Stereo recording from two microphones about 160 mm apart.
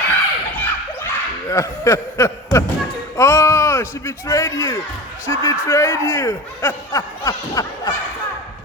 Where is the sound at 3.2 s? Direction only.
20° left (ahead or behind).